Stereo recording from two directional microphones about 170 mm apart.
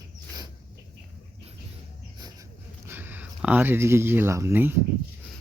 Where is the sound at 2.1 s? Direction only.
20° right (ahead or behind).